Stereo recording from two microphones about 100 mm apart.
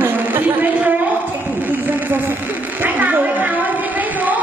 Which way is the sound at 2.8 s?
15° right (ahead or behind).